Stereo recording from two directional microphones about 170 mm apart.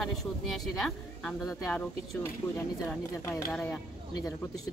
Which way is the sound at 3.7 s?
20° left (ahead or behind).